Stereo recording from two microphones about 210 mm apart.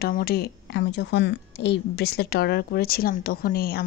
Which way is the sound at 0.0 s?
45° left (ahead or behind).